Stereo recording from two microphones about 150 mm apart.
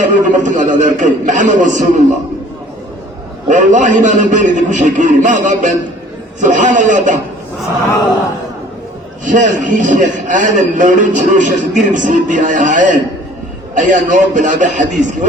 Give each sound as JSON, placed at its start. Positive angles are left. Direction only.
{"t": 0.1, "sound": "a man's voice", "side_deg": -60}
{"t": 3.5, "sound": "a man's voice", "side_deg": -60}
{"t": 9.2, "sound": "a man's voice", "side_deg": -60}